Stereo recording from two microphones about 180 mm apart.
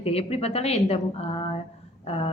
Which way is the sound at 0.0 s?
35° left (ahead or behind).